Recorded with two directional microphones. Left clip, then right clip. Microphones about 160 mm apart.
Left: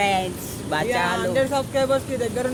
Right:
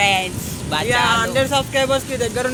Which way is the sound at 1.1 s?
5° left (ahead or behind).